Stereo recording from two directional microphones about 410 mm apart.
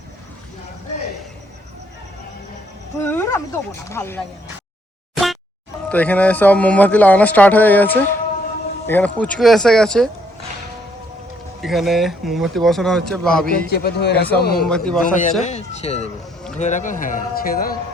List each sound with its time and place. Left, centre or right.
3.0 s speech: centre
5.1 s boing: centre
5.9 s speech: centre
11.6 s speech: centre
13.7 s speech: left
14.6 s speech: centre
15.0 s speech: centre